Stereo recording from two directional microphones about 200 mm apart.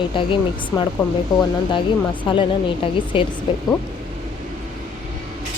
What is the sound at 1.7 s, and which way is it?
Speech, 25° left (ahead or behind).